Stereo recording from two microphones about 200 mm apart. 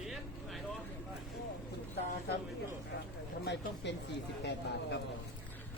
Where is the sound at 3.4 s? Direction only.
60° left (ahead or behind).